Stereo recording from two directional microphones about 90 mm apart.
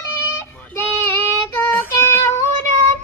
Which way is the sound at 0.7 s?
25° left (ahead or behind).